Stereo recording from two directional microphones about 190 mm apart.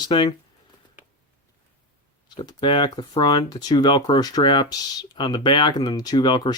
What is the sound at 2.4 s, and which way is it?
Speech, 25° left (ahead or behind).